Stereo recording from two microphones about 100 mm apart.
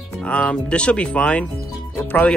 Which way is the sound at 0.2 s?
10° left (ahead or behind).